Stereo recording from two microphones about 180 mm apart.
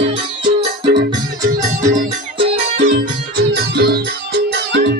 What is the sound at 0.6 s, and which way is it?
Music, 25° right (ahead or behind).